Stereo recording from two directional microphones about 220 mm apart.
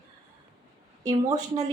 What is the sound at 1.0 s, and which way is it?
Speech, 15° right (ahead or behind).